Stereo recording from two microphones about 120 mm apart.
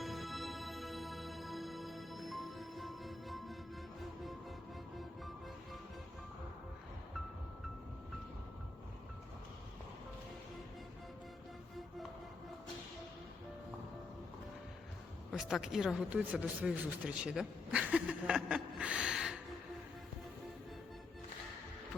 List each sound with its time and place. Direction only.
0.0 s music: centre (ahead or behind)
15.3 s speech: centre (ahead or behind)